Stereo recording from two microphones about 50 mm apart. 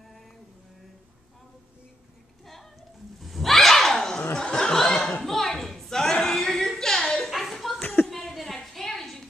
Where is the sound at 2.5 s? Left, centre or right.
Centre.